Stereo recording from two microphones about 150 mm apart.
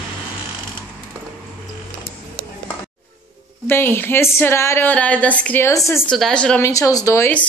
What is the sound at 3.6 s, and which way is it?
Speech, 15° left (ahead or behind).